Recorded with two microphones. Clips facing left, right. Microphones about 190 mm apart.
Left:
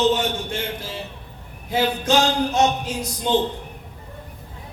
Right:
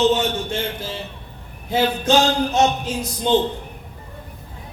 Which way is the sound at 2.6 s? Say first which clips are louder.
Right 1 dB; 25° right (ahead or behind).